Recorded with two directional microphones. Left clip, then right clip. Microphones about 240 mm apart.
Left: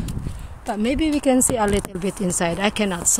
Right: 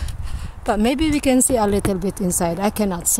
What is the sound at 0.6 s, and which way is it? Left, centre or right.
Speech, right.